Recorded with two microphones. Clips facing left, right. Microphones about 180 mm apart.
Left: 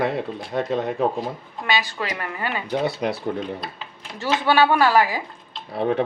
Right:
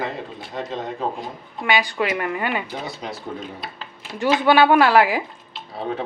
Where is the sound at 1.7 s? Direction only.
15° right (ahead or behind).